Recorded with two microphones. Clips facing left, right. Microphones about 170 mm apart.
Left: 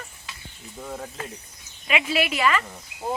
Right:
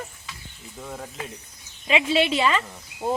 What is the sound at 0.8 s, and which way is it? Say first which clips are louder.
Speech: left 1 dB; centre (ahead or behind).